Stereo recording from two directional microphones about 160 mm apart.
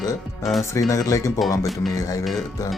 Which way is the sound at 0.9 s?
20° left (ahead or behind).